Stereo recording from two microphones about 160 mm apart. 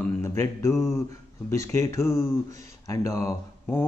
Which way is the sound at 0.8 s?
15° left (ahead or behind).